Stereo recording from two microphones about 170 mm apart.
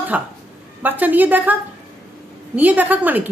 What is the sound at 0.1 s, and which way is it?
Speech, 10° right (ahead or behind).